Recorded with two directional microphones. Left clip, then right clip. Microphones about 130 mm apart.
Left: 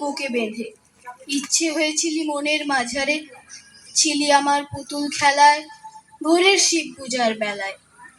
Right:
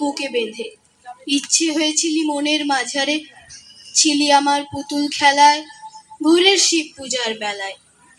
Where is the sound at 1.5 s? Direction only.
20° right (ahead or behind).